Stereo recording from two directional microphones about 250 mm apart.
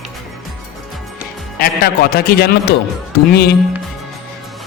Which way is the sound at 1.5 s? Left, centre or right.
Left.